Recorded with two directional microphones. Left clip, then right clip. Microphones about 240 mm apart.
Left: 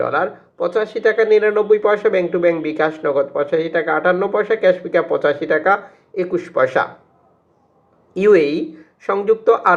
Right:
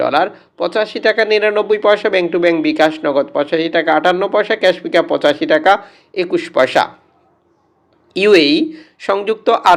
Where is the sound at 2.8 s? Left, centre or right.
Right.